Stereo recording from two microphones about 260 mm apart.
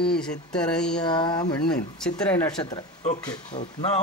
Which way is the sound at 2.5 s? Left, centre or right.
Centre.